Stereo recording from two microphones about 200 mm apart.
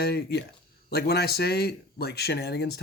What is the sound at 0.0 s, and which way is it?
Speech, 55° left (ahead or behind).